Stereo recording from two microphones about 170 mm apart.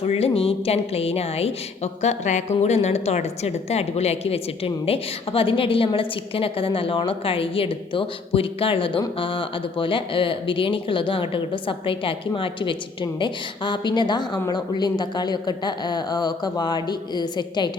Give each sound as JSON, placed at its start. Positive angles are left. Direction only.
{"t": 0.0, "sound": "a woman's voice", "side_deg": 35}